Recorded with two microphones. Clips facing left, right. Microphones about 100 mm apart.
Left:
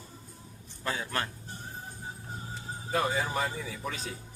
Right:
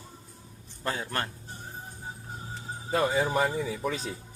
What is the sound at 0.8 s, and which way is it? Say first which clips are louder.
Speech: right 1 dB; 35° right (ahead or behind).